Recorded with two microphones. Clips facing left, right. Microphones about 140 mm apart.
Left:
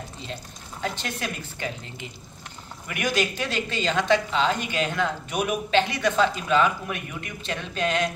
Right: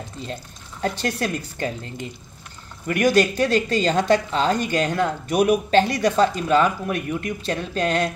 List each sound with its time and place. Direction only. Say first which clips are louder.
0.8 s speech: right 6 dB; 40° right (ahead or behind)